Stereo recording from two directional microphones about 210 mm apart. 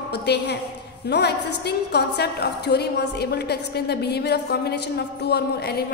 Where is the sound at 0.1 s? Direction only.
55° left (ahead or behind).